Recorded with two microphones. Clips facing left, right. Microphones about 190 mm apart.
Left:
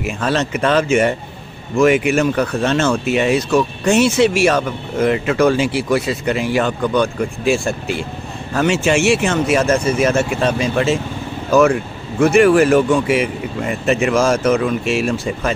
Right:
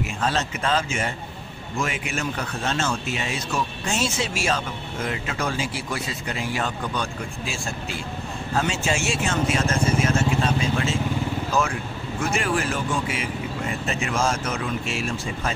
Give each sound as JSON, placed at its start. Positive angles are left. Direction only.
{"t": 0.0, "sound": "speech", "side_deg": 75}
{"t": 12.2, "sound": "speech", "side_deg": 70}